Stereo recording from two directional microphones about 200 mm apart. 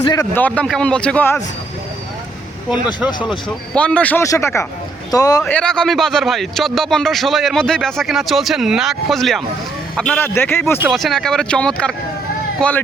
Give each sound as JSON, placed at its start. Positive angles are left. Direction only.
{"t": 0.0, "sound": "a man's voice", "side_deg": 20}
{"t": 0.3, "sound": "a man's voice", "side_deg": 5}
{"t": 2.6, "sound": "speech", "side_deg": -5}
{"t": 3.8, "sound": "a man's voice", "side_deg": 5}
{"t": 5.4, "sound": "a man's voice", "side_deg": 5}
{"t": 10.8, "sound": "speech", "side_deg": 0}